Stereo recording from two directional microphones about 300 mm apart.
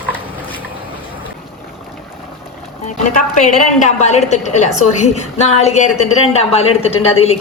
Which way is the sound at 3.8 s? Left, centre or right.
Left.